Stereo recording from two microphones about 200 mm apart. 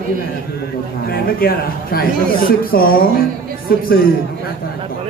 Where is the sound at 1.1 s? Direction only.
50° left (ahead or behind).